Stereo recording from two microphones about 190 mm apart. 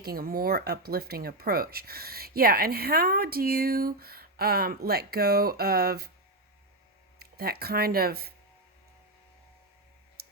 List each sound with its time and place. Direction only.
0.0 s speech: 50° right (ahead or behind)
7.2 s speech: 55° right (ahead or behind)